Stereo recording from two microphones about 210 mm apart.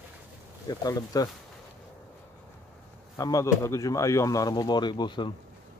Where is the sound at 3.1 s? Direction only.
15° left (ahead or behind).